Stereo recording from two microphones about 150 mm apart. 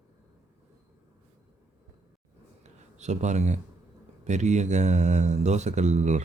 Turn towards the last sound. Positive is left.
turn(degrees=-50)  # may be behind; listen again after turning